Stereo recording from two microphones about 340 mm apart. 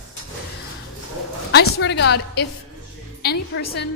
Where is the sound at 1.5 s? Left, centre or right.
Left.